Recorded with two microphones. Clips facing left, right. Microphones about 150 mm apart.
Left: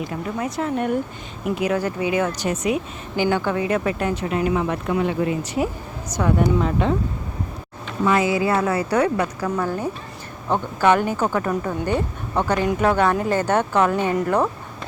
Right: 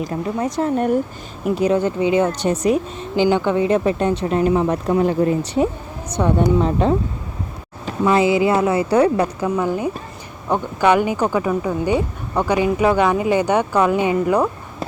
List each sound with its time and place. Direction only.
0.0 s speech: 35° right (ahead or behind)
3.2 s speech: 20° right (ahead or behind); by 5.4 s 40° right (ahead or behind)
6.1 s speech: 30° right (ahead or behind)
8.0 s speech: 25° right (ahead or behind)
9.6 s speech: 15° right (ahead or behind)